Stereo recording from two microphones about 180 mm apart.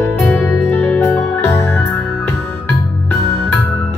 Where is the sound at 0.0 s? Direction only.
15° left (ahead or behind).